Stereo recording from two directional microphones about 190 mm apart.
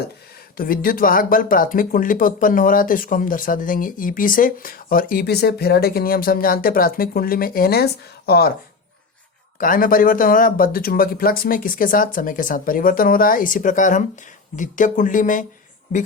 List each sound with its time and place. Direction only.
0.5 s speech: 50° left (ahead or behind)
9.6 s speech: 45° left (ahead or behind)